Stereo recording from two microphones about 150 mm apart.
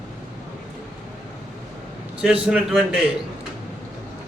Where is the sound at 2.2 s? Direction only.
5° right (ahead or behind).